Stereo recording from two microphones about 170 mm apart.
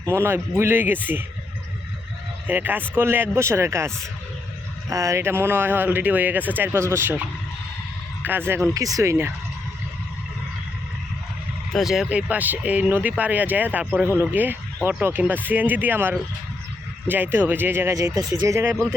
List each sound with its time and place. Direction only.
0.0 s speech: 15° right (ahead or behind)
2.5 s speech: 10° right (ahead or behind)
8.2 s speech: 10° right (ahead or behind)
11.7 s speech: centre (ahead or behind)